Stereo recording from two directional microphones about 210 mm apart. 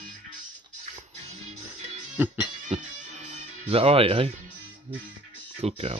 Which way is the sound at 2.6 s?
30° right (ahead or behind).